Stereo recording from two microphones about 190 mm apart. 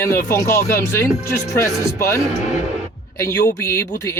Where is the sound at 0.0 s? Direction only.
15° left (ahead or behind).